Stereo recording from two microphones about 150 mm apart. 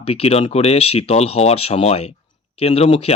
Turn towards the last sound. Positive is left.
turn(degrees=45)  # may be behind; listen again after turning